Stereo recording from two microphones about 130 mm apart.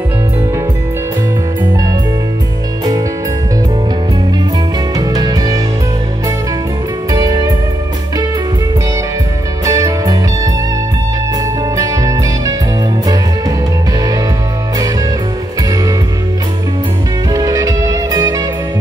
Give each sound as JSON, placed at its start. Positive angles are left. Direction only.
{"t": 4.9, "sound": "music", "side_deg": -30}
{"t": 7.1, "sound": "music", "side_deg": -30}
{"t": 9.7, "sound": "music", "side_deg": -25}
{"t": 11.7, "sound": "music", "side_deg": -25}
{"t": 17.3, "sound": "music", "side_deg": -30}